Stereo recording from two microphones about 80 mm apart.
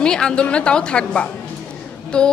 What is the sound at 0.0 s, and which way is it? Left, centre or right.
A woman's voice, centre.